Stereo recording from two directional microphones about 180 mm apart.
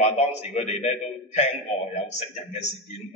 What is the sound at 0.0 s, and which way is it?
A man's voice, 40° left (ahead or behind).